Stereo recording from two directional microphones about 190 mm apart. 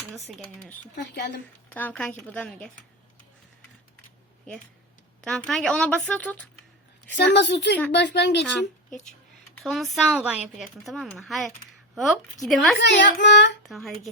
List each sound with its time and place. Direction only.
0.3 s speech: centre (ahead or behind)
0.9 s a child's voice: 60° left (ahead or behind)
1.7 s a woman's voice: 10° left (ahead or behind)
5.2 s speech: centre (ahead or behind)
7.3 s a child's voice: 65° left (ahead or behind)
8.4 s speech: centre (ahead or behind)
12.8 s a child's voice: 65° left (ahead or behind)
13.6 s speech: centre (ahead or behind)